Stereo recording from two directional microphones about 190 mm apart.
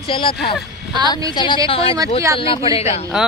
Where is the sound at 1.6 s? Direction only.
30° left (ahead or behind).